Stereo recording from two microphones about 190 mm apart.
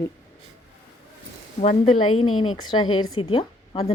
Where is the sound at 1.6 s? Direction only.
35° left (ahead or behind).